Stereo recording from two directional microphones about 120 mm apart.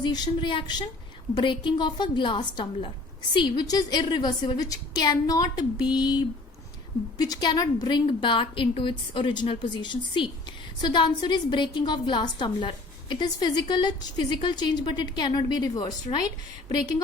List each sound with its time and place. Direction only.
0.0 s a woman's voice: 35° left (ahead or behind)
16.1 s a woman's voice: 45° left (ahead or behind)